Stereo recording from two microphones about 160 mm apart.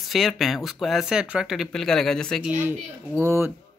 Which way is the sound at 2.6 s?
15° right (ahead or behind).